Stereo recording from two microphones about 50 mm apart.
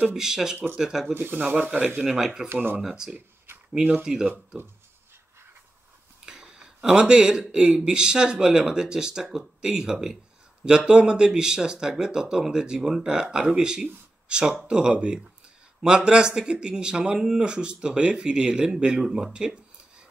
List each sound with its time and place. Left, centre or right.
0.1 s speech: centre
1.1 s speech: right
1.4 s speech: right
2.0 s speech: centre
2.5 s speech: right
2.8 s speech: centre
3.5 s a sound: right
4.0 s speech: centre
6.2 s speech: centre